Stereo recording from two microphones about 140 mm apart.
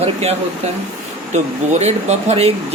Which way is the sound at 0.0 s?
50° right (ahead or behind).